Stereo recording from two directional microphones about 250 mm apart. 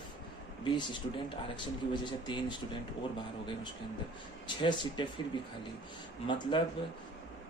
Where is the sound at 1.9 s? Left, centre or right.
Centre.